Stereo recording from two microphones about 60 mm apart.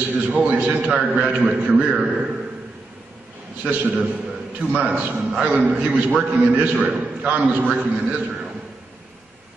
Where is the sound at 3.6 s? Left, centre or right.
Right.